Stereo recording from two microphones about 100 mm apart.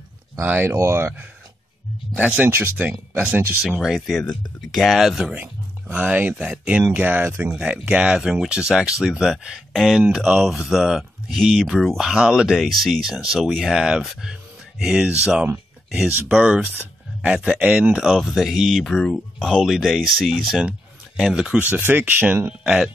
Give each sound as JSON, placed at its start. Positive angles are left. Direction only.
{"t": 0.5, "sound": "speech", "side_deg": -20}
{"t": 2.1, "sound": "speech", "side_deg": -10}
{"t": 3.8, "sound": "speech", "side_deg": 0}
{"t": 21.5, "sound": "speech", "side_deg": -15}
{"t": 22.6, "sound": "speech", "side_deg": -5}